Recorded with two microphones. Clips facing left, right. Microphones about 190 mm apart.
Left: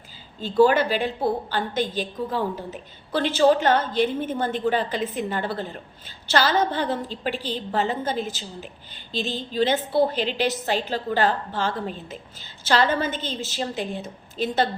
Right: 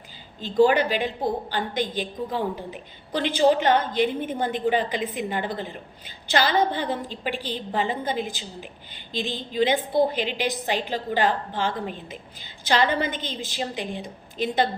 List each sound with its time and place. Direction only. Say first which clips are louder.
0.6 s a woman's voice: left 1 dB; 15° right (ahead or behind)